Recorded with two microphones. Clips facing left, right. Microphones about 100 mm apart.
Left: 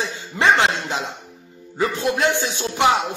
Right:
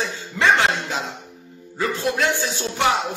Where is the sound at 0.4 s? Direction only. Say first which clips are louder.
Left 1 dB; 20° left (ahead or behind).